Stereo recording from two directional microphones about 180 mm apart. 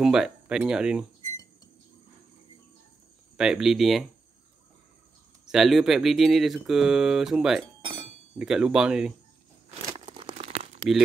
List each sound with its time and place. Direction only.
0.0 s speech: 5° right (ahead or behind)
3.3 s speech: 5° right (ahead or behind)
5.5 s speech: centre (ahead or behind)
10.1 s crumpling: 30° right (ahead or behind)